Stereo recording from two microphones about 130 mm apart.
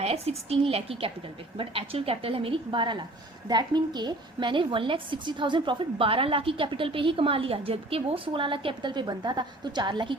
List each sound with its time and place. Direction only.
0.0 s a woman's voice: 50° right (ahead or behind); by 10.2 s 35° right (ahead or behind)